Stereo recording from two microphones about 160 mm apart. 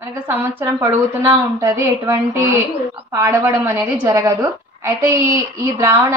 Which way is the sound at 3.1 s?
15° right (ahead or behind).